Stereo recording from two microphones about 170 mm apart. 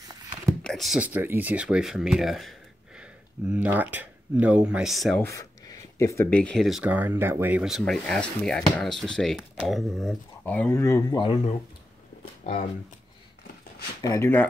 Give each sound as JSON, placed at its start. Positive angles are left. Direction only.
{"t": 0.1, "sound": "a sound", "side_deg": -20}
{"t": 0.7, "sound": "speech", "side_deg": 0}
{"t": 5.2, "sound": "speech", "side_deg": 20}
{"t": 14.0, "sound": "speech", "side_deg": 15}